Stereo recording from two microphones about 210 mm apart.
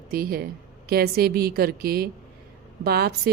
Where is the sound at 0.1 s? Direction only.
45° right (ahead or behind).